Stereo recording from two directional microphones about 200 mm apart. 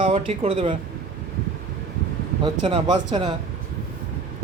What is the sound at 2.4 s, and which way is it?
Speech, 25° right (ahead or behind).